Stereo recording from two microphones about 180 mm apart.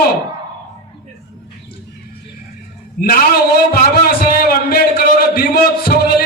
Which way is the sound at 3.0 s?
55° left (ahead or behind).